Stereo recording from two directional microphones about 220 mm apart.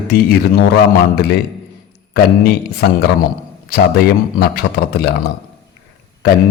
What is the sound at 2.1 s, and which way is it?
Speech, 45° left (ahead or behind).